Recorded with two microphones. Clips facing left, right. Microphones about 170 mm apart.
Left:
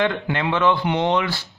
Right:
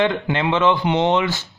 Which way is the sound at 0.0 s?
20° right (ahead or behind).